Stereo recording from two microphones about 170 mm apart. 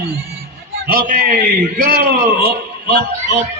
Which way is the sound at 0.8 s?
60° right (ahead or behind).